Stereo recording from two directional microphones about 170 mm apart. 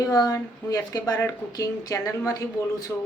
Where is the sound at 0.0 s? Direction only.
20° left (ahead or behind).